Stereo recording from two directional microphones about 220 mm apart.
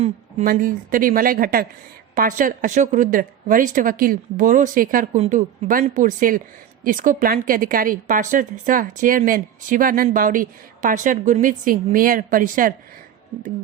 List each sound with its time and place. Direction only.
0.0 s a woman's voice: 35° right (ahead or behind)